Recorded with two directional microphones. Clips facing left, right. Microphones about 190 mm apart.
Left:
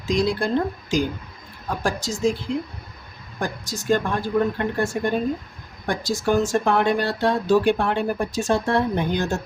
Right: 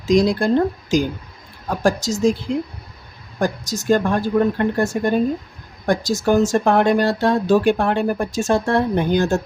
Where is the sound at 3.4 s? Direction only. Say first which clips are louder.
Right 7 dB; 40° right (ahead or behind).